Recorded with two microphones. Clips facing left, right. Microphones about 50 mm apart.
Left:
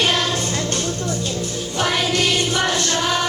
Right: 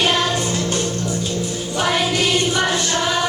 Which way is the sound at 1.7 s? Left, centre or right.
Centre.